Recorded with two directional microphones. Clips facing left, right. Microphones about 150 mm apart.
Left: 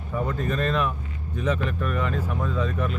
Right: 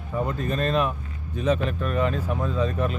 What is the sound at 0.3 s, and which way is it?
Speech, 25° right (ahead or behind).